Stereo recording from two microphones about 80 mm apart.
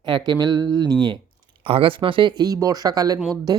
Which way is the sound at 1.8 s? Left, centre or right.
Right.